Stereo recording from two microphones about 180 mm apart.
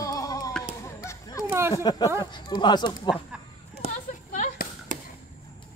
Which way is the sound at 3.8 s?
35° right (ahead or behind).